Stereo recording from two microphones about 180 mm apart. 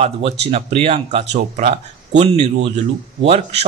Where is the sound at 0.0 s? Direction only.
35° right (ahead or behind).